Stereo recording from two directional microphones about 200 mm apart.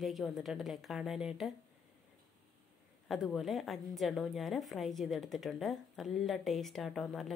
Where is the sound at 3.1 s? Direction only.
Centre (ahead or behind).